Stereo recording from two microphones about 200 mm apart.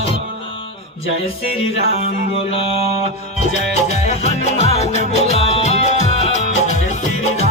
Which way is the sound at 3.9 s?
35° left (ahead or behind).